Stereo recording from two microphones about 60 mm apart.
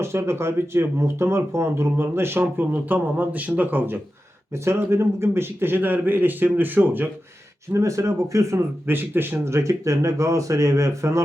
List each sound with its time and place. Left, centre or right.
0.0 s speech: right
2.7 s speech: right
4.5 s a man's voice: right
7.8 s speech: right
8.9 s speech: right